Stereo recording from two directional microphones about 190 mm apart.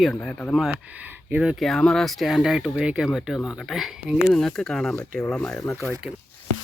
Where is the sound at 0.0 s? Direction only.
5° left (ahead or behind).